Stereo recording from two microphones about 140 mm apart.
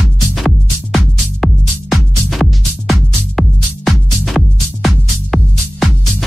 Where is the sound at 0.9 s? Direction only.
Centre (ahead or behind).